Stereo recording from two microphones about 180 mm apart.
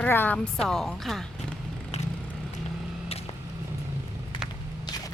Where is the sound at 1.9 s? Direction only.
35° left (ahead or behind).